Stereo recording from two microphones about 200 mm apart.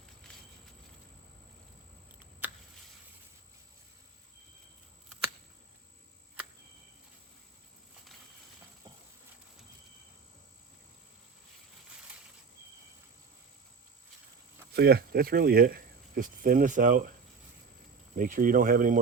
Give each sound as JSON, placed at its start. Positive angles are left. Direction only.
{"t": 2.4, "sound": "a sound", "side_deg": -10}
{"t": 14.7, "sound": "speech", "side_deg": -55}
{"t": 18.2, "sound": "speech", "side_deg": -45}